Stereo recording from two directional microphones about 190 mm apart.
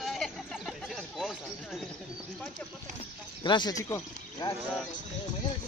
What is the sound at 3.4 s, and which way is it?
Speech, 25° left (ahead or behind).